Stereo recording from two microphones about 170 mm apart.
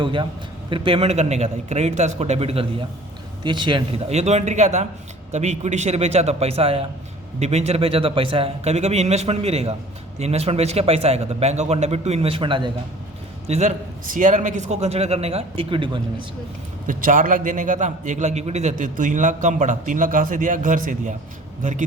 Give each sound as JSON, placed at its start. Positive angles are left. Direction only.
{"t": 0.0, "sound": "a man's voice", "side_deg": -30}
{"t": 13.5, "sound": "speech", "side_deg": -40}
{"t": 16.8, "sound": "a man's voice", "side_deg": -50}